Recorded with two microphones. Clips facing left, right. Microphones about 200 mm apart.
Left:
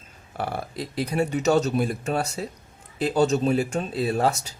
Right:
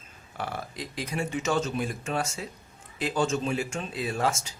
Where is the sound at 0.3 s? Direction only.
35° left (ahead or behind).